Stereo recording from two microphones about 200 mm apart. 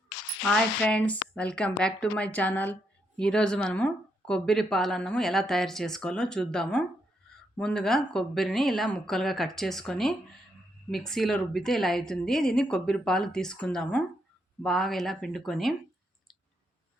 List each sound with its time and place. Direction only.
0.4 s speech: 5° left (ahead or behind)